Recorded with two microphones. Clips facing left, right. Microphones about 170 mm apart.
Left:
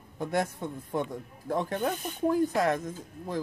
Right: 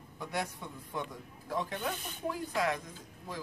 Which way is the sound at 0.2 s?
50° left (ahead or behind).